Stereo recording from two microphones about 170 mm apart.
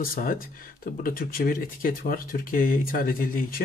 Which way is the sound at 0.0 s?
55° left (ahead or behind).